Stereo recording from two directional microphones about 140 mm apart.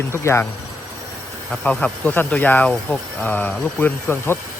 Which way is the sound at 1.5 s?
5° left (ahead or behind).